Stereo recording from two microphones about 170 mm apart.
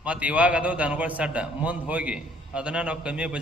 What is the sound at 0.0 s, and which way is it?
A man's voice, 10° right (ahead or behind).